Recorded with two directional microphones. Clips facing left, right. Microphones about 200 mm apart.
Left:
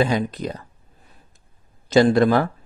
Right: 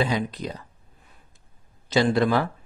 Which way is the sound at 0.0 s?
50° left (ahead or behind).